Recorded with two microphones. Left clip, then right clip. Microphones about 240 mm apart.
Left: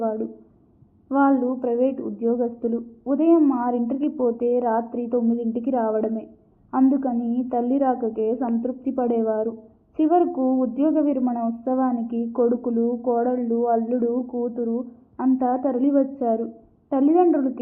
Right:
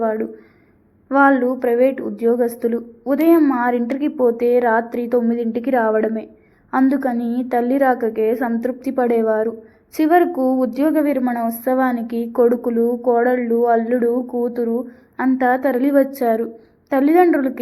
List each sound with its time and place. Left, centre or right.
0.0 s a sound: right
1.0 s a woman's voice: right
8.4 s a woman's voice: right
9.0 s a woman's voice: right
9.3 s a woman's voice: right
10.0 s a woman's voice: right
10.3 s a woman's voice: right
11.9 s a woman's voice: right